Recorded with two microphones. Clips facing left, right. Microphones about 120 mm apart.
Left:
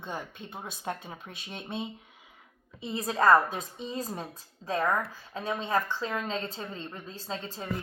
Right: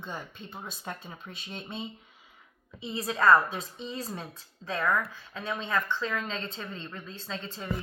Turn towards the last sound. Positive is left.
turn(degrees=40)  # may be behind; listen again after turning